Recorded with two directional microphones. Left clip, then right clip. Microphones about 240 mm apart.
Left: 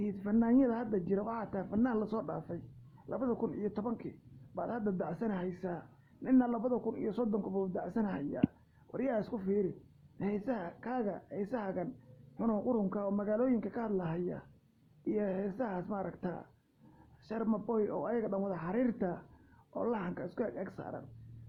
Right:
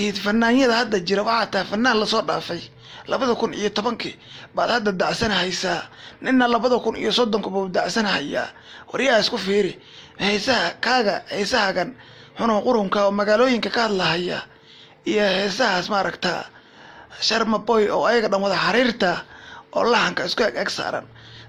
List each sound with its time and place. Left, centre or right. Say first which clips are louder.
0.0 s a man's voice: right 15 dB; right